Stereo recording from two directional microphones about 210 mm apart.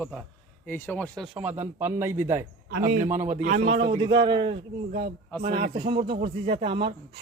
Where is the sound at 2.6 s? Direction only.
45° right (ahead or behind).